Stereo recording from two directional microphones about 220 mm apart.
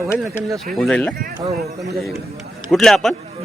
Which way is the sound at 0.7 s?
5° left (ahead or behind).